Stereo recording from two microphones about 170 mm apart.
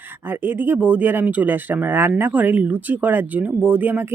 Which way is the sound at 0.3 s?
10° right (ahead or behind).